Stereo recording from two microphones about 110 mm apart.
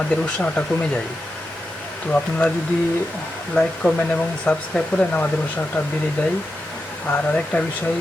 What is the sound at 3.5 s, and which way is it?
Speech, 10° left (ahead or behind).